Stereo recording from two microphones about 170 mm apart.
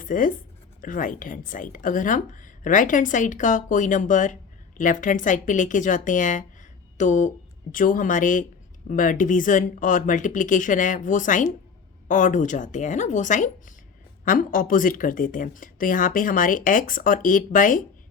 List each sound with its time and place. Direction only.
0.0 s speech: 50° left (ahead or behind)